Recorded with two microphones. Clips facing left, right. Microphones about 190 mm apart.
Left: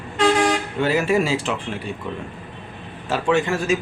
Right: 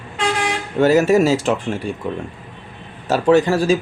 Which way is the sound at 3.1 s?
40° right (ahead or behind).